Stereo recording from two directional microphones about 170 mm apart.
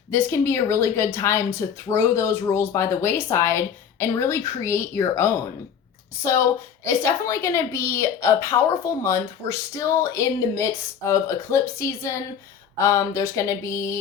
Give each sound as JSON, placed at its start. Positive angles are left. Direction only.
{"t": 0.1, "sound": "speech", "side_deg": 15}
{"t": 6.8, "sound": "speech", "side_deg": 15}